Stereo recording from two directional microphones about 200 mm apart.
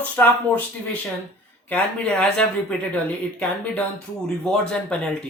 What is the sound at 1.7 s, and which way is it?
Speech, 5° left (ahead or behind).